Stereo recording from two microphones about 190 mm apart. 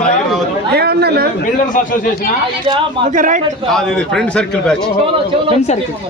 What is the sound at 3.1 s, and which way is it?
Speech, 40° right (ahead or behind).